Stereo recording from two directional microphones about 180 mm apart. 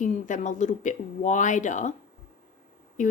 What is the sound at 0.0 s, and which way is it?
Speech, 45° left (ahead or behind).